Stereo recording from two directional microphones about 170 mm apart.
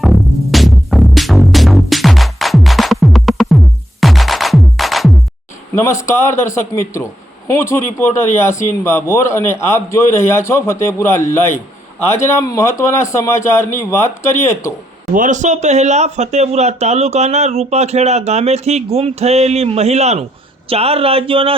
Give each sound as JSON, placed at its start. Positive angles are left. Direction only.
{"t": 0.0, "sound": "music", "side_deg": 0}
{"t": 6.0, "sound": "a man's voice", "side_deg": 15}
{"t": 15.1, "sound": "speech", "side_deg": -50}